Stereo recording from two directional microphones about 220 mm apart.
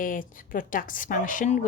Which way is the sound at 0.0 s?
40° left (ahead or behind).